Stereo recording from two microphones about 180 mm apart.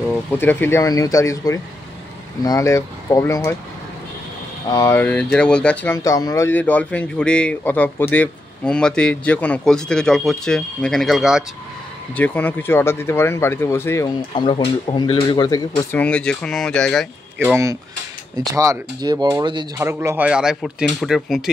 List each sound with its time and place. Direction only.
0.3 s speech: 10° left (ahead or behind)
4.6 s speech: 15° left (ahead or behind)
6.0 s speech: 20° left (ahead or behind); by 11.4 s centre (ahead or behind)
12.2 s speech: 10° left (ahead or behind)
14.3 s speech: 25° left (ahead or behind)
16.0 s speech: 5° left (ahead or behind)
17.4 s speech: 10° right (ahead or behind)
19.8 s speech: 15° right (ahead or behind)